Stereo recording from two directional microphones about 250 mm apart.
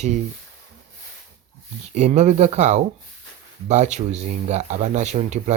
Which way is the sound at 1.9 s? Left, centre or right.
Right.